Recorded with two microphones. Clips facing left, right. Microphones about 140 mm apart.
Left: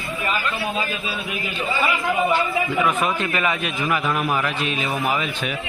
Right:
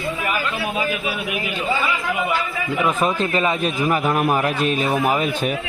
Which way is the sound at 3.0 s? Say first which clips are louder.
Right 3 dB; 30° right (ahead or behind).